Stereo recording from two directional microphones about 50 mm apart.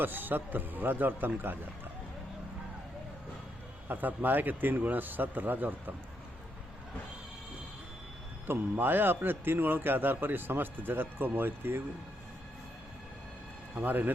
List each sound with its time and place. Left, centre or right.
0.0 s a man's voice: right
3.8 s a man's voice: right
8.4 s a man's voice: right
13.7 s a man's voice: right